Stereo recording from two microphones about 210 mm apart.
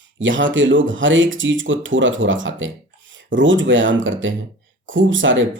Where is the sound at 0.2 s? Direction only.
65° right (ahead or behind).